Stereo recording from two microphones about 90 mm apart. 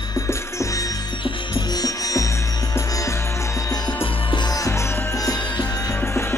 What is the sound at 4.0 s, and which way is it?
Music, 65° left (ahead or behind).